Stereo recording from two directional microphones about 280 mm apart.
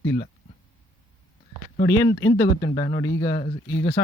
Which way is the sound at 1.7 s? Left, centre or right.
Left.